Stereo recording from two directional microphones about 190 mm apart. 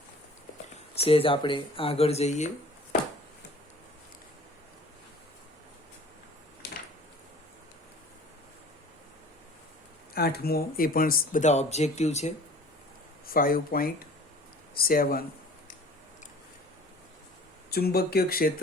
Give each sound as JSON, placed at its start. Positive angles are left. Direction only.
{"t": 1.0, "sound": "speech", "side_deg": 30}
{"t": 10.2, "sound": "speech", "side_deg": 55}
{"t": 13.2, "sound": "speech", "side_deg": 50}
{"t": 17.7, "sound": "speech", "side_deg": 55}